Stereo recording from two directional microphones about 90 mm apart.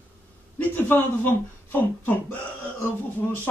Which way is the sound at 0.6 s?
20° left (ahead or behind).